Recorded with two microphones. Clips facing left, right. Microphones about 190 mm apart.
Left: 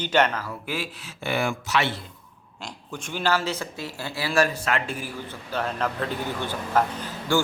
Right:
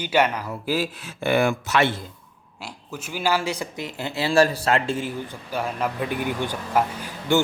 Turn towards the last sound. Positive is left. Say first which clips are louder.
# right 3 dB
turn(degrees=-20)  # may be behind; listen again after turning